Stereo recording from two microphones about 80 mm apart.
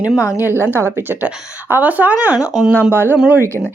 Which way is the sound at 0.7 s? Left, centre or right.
Right.